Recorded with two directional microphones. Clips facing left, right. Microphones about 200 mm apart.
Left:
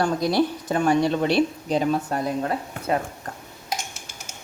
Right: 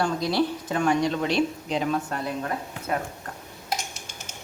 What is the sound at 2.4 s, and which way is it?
Speech, 30° left (ahead or behind).